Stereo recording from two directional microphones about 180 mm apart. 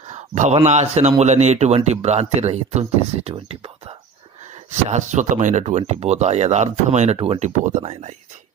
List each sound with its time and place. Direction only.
0.1 s speech: 40° right (ahead or behind)